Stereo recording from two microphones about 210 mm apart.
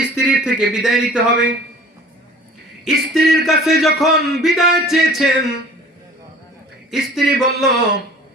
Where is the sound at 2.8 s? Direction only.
Centre (ahead or behind).